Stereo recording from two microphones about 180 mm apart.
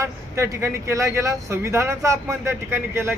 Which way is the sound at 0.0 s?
15° right (ahead or behind).